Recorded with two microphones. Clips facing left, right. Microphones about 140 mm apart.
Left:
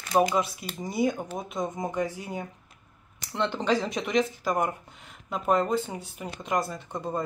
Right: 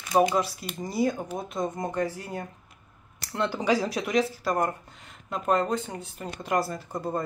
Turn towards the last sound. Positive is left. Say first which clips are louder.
# right 1 dB
turn(degrees=-5)  # may be behind; listen again after turning